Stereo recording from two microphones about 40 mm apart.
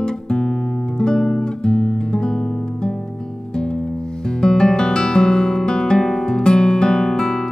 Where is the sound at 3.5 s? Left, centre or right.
Centre.